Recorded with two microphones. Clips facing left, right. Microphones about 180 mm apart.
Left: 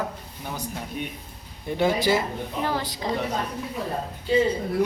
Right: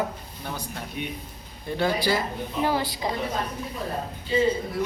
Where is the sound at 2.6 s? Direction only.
10° right (ahead or behind).